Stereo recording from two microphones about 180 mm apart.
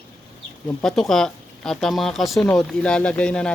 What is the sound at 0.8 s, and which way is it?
Speech, centre (ahead or behind).